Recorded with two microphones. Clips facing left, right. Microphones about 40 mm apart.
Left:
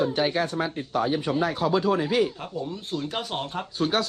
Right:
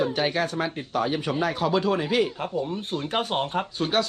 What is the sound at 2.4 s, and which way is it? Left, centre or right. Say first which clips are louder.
Speech: right 4 dB; right.